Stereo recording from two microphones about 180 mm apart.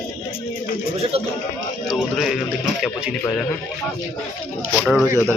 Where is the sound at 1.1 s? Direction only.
30° right (ahead or behind).